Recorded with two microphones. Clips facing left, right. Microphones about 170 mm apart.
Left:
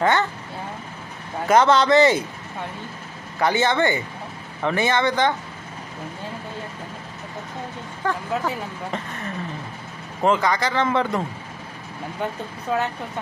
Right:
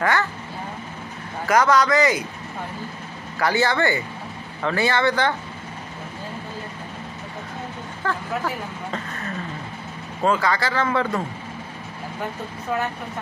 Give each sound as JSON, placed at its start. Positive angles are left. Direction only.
{"t": 0.0, "sound": "speech", "side_deg": 25}
{"t": 1.4, "sound": "speech", "side_deg": 25}
{"t": 3.3, "sound": "speech", "side_deg": 20}
{"t": 8.1, "sound": "speech", "side_deg": 20}
{"t": 10.2, "sound": "speech", "side_deg": 20}